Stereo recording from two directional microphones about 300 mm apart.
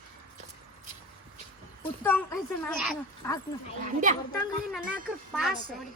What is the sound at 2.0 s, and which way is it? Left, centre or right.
Speech, centre.